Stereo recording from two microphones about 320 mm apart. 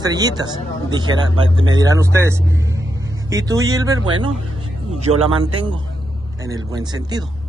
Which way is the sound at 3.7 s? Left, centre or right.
Centre.